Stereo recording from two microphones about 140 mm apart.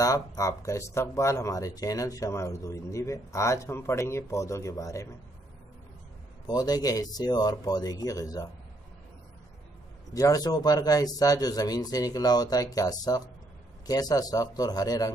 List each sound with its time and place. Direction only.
0.0 s speech: 25° left (ahead or behind)
6.4 s speech: 30° left (ahead or behind)
10.1 s speech: 25° left (ahead or behind)